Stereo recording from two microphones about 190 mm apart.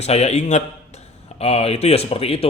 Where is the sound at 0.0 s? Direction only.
35° left (ahead or behind).